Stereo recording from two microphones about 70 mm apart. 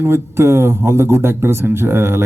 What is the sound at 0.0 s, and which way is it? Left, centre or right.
A man's voice, right.